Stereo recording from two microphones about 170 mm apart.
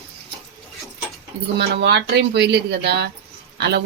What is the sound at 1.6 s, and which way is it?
Speech, 75° right (ahead or behind).